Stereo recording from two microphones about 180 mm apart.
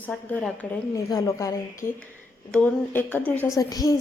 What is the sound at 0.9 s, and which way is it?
Speech, 20° left (ahead or behind).